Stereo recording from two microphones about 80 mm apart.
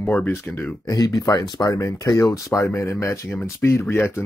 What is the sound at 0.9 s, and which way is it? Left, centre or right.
Speech, left.